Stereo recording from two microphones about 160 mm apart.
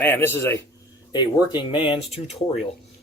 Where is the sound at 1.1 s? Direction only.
25° left (ahead or behind).